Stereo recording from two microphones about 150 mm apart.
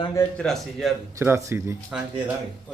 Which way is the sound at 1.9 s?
5° right (ahead or behind).